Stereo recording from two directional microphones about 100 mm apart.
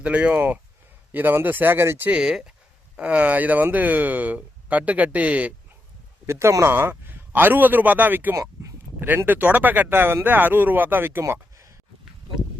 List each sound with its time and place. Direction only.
0.0 s speech: 15° right (ahead or behind)
6.2 s speech: 30° right (ahead or behind)
8.4 s a sound: 30° right (ahead or behind)
9.0 s speech: 20° right (ahead or behind)